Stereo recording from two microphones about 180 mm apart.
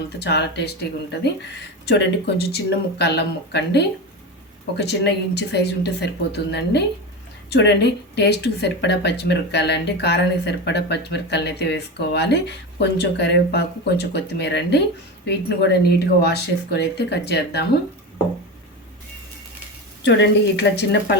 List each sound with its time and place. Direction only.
0.2 s speech: 70° left (ahead or behind)
20.1 s speech: 75° left (ahead or behind)